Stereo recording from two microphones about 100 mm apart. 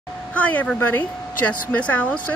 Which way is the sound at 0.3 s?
15° left (ahead or behind).